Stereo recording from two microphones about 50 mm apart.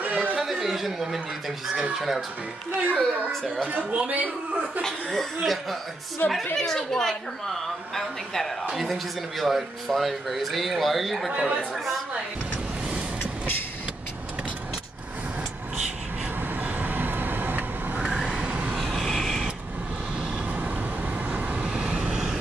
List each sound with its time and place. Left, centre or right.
0.0 s a sound: right
0.4 s a sound: centre
1.8 s speech: centre
2.8 s a child's voice: right
4.8 s speech: centre
6.2 s a woman's voice: left
6.5 s a woman's voice: centre
16.6 s vehicle: right
18.0 s vehicle: centre
18.8 s vehicle: centre
21.3 s vehicle: right
21.5 s vehicle: right